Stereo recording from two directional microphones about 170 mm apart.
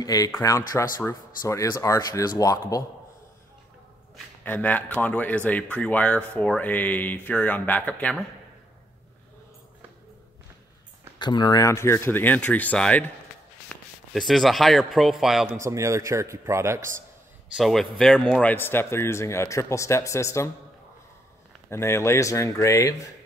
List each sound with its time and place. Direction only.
0.0 s speech: 20° left (ahead or behind)
4.5 s a man's voice: 10° left (ahead or behind)
11.1 s a man's voice: 25° left (ahead or behind); by 15.5 s centre (ahead or behind)
15.6 s speech: 15° right (ahead or behind)
17.6 s speech: centre (ahead or behind)
18.4 s a man's voice: 10° left (ahead or behind)
21.6 s a man's voice: 15° left (ahead or behind)